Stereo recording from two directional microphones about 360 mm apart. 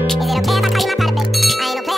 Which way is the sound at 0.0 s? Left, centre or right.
Centre.